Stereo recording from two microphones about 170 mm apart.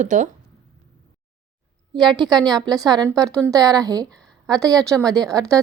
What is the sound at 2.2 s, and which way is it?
Speech, centre (ahead or behind).